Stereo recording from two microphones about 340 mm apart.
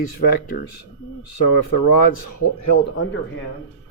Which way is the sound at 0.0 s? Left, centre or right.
Left.